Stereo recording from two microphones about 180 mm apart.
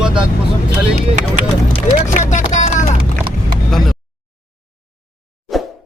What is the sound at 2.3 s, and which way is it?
Music, 40° left (ahead or behind).